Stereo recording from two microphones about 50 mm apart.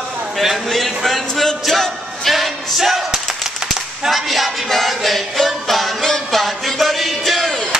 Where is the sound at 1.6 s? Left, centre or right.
Centre.